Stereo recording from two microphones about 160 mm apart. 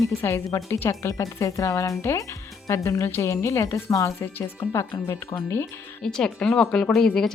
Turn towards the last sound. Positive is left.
turn(degrees=5)  # may be behind; listen again after turning